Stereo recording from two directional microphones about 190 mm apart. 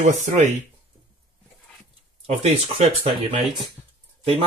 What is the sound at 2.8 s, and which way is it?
Speech, 35° right (ahead or behind).